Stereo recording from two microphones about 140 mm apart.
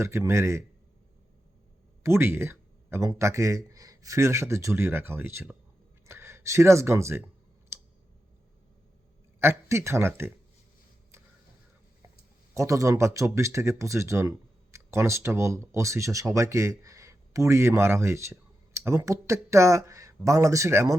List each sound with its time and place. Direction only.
0.0 s speech: 20° right (ahead or behind)
2.0 s speech: 20° right (ahead or behind)
7.7 s a sound: 20° right (ahead or behind)
9.4 s a man's voice: 20° right (ahead or behind)
12.5 s speech: 20° right (ahead or behind)